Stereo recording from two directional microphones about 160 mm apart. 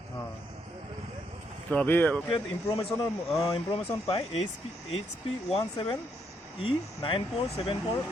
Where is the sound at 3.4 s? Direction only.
35° left (ahead or behind).